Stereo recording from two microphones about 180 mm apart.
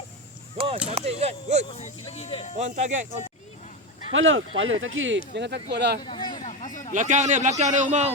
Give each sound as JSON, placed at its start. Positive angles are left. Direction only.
{"t": 0.5, "sound": "a sound", "side_deg": -30}
{"t": 0.9, "sound": "speech", "side_deg": -35}
{"t": 1.6, "sound": "speech", "side_deg": 35}
{"t": 2.6, "sound": "speech", "side_deg": -40}
{"t": 4.1, "sound": "speech", "side_deg": -90}
{"t": 5.3, "sound": "speech", "side_deg": -70}
{"t": 6.1, "sound": "speech", "side_deg": 25}
{"t": 6.4, "sound": "a sound", "side_deg": 45}
{"t": 6.9, "sound": "a man's voice", "side_deg": -45}